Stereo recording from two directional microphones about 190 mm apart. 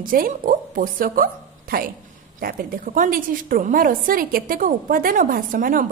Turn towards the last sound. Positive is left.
turn(degrees=-45)  # may be behind; listen again after turning